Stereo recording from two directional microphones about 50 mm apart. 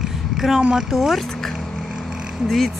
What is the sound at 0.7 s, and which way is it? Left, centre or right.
Speech, centre.